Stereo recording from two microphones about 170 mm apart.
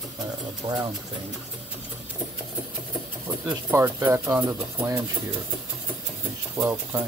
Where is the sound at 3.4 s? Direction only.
10° right (ahead or behind).